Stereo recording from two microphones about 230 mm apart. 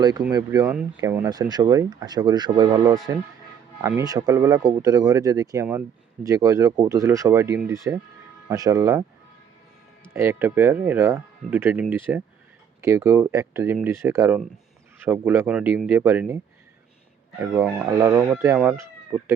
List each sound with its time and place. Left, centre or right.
0.0 s speech: centre
10.2 s speech: centre
17.5 s speech: centre
17.8 s speech: centre